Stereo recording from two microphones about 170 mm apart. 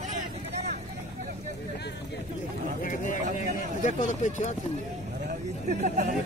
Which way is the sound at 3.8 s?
45° left (ahead or behind).